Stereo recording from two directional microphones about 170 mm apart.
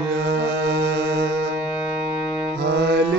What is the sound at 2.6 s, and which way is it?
Mantra, 90° right.